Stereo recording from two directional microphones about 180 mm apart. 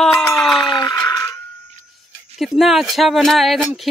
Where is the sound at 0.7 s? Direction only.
25° left (ahead or behind).